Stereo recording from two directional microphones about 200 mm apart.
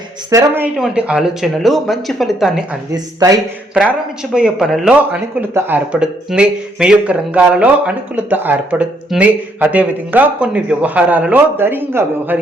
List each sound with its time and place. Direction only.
0.3 s speech: 15° right (ahead or behind)
2.9 s speech: 20° right (ahead or behind)
4.4 s speech: 5° right (ahead or behind)